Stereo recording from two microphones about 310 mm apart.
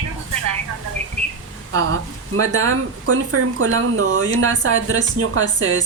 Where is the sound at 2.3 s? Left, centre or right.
Right.